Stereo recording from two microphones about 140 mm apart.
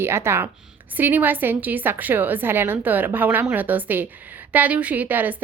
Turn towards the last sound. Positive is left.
turn(degrees=-15)  # may be behind; listen again after turning